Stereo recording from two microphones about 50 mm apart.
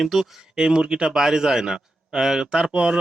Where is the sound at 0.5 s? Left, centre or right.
Centre.